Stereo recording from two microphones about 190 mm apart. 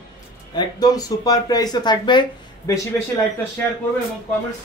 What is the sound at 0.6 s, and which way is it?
Speech, 20° left (ahead or behind).